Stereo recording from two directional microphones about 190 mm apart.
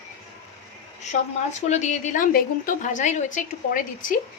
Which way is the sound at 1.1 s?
35° left (ahead or behind).